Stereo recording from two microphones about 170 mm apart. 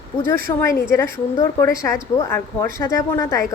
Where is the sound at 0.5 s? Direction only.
25° left (ahead or behind).